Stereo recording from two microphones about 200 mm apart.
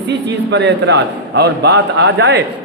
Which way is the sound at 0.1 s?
60° right (ahead or behind).